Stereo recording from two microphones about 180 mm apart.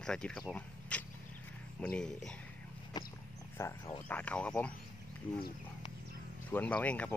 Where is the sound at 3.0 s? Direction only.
25° left (ahead or behind).